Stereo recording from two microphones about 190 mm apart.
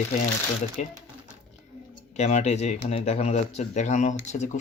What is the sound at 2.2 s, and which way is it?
Speech, 35° left (ahead or behind).